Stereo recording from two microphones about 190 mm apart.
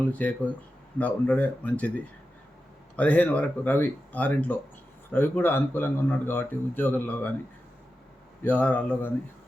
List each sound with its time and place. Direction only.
0.0 s speech: 10° left (ahead or behind)
2.9 s speech: 5° left (ahead or behind)
8.4 s speech: 10° left (ahead or behind)